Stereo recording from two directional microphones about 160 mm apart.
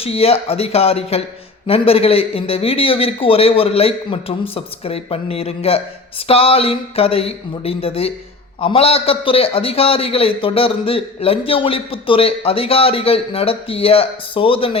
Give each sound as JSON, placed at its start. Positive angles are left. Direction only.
{"t": 0.0, "sound": "a man's voice", "side_deg": 40}